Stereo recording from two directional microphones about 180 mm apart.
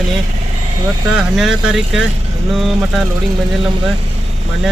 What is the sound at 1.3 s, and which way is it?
Speech, centre (ahead or behind).